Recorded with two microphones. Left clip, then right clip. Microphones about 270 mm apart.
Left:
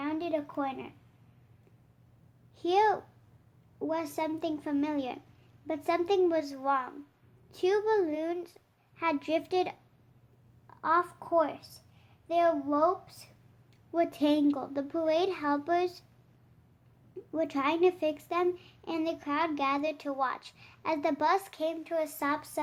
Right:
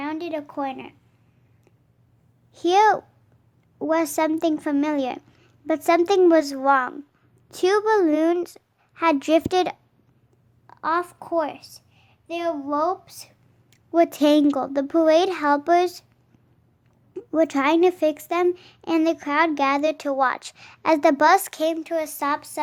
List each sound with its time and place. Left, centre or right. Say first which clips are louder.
0.0 s a sound: right 4 dB; right
2.6 s a child's voice: right 9 dB; right
17.2 s a child's voice: right 11 dB; right